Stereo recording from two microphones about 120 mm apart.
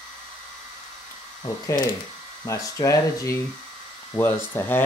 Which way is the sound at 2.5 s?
25° left (ahead or behind).